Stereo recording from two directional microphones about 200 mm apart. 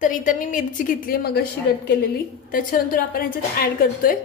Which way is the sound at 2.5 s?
45° left (ahead or behind).